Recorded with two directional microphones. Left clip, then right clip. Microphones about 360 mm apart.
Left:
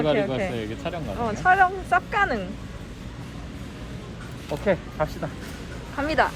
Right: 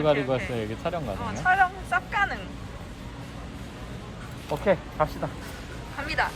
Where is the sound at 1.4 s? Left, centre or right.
Centre.